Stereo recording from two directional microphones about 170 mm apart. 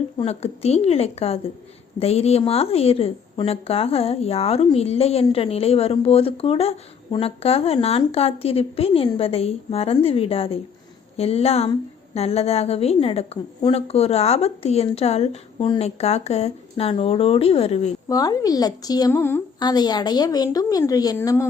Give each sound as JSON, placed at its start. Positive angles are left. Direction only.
{"t": 0.2, "sound": "a woman's voice", "side_deg": 40}
{"t": 18.1, "sound": "a woman's voice", "side_deg": 20}